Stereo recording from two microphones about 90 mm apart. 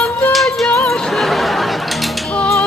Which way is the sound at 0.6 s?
15° left (ahead or behind).